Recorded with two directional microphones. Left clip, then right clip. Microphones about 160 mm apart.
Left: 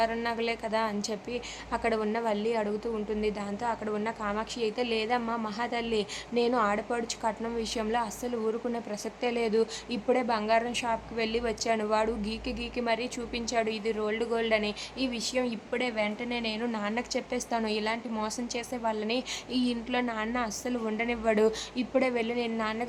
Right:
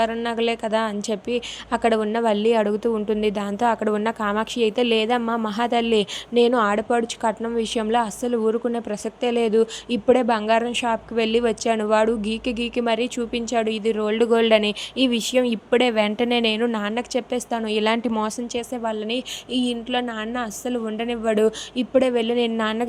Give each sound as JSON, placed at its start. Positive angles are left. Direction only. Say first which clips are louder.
{"t": 0.0, "sound": "a woman's voice", "louder": "right 7 dB", "side_deg": -30}
{"t": 16.6, "sound": "a woman's voice", "louder": "right 8 dB", "side_deg": -35}